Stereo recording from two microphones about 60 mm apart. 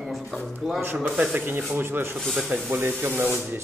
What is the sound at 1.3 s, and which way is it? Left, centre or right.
Speech, right.